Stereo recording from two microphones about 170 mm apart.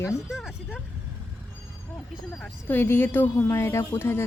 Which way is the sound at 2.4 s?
10° left (ahead or behind).